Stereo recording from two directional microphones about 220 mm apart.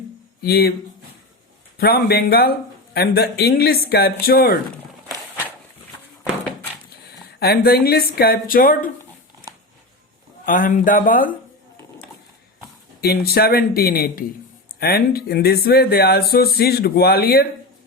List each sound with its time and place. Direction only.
0.4 s speech: 45° left (ahead or behind)
1.8 s speech: 45° left (ahead or behind)
7.3 s speech: 45° left (ahead or behind)
10.4 s speech: 40° left (ahead or behind)
13.0 s speech: 45° left (ahead or behind)